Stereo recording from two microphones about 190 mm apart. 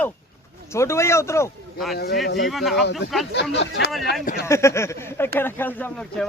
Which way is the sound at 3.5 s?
65° left (ahead or behind).